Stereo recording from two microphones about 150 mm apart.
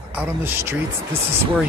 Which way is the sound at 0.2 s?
15° right (ahead or behind).